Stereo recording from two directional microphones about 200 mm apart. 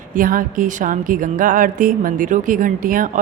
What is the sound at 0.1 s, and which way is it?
A woman's voice, 45° right (ahead or behind).